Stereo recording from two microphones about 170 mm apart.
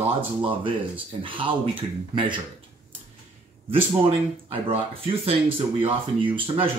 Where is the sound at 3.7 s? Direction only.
35° right (ahead or behind).